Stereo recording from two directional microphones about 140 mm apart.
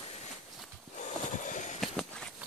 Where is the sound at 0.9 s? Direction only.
60° left (ahead or behind).